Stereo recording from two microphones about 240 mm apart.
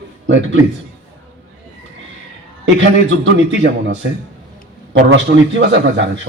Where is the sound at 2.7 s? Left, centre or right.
Right.